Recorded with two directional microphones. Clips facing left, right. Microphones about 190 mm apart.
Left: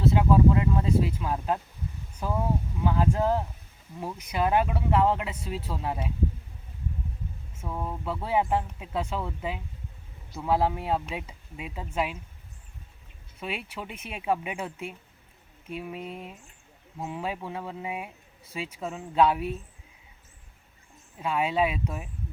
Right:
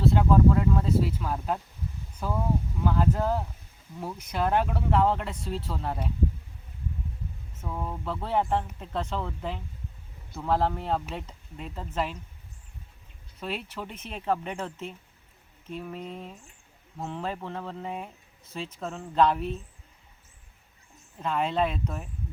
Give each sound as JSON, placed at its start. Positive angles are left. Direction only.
{"t": 0.0, "sound": "a sound", "side_deg": 5}
{"t": 2.8, "sound": "speech", "side_deg": 5}
{"t": 7.5, "sound": "speech", "side_deg": 10}
{"t": 13.4, "sound": "speech", "side_deg": 10}
{"t": 21.2, "sound": "speech", "side_deg": 5}